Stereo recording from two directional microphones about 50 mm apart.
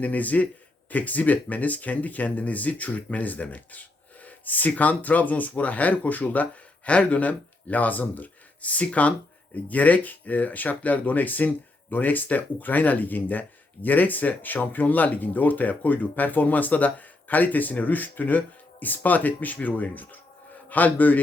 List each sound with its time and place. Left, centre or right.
0.0 s speech: left